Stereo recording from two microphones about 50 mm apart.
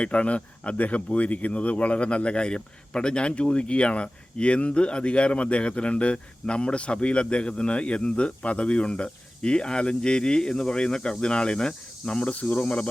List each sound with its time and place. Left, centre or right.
0.0 s speech: left